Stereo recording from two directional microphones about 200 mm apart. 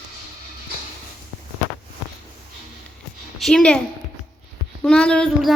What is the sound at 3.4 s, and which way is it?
Speech, centre (ahead or behind).